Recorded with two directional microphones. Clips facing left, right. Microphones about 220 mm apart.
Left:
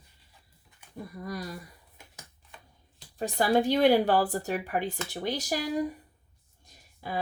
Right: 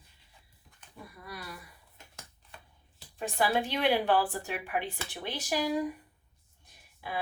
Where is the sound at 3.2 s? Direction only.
40° left (ahead or behind).